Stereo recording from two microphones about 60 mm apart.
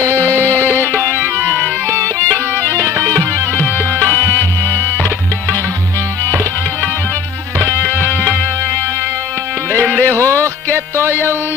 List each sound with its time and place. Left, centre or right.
0.3 s music: left
2.7 s music: right
3.1 s music: left
7.6 s music: left
10.0 s music: left